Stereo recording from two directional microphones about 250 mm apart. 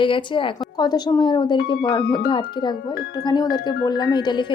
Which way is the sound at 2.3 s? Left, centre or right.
Centre.